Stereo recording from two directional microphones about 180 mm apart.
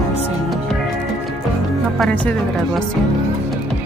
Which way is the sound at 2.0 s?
5° left (ahead or behind).